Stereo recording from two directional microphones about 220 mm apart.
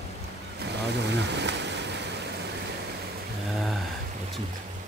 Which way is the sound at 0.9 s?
50° right (ahead or behind).